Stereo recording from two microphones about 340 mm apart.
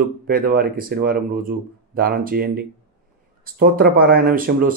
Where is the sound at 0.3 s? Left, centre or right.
Right.